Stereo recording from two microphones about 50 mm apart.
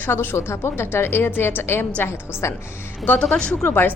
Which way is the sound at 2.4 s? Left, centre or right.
Left.